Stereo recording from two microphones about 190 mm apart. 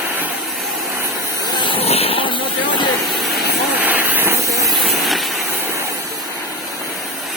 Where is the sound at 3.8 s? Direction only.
10° right (ahead or behind).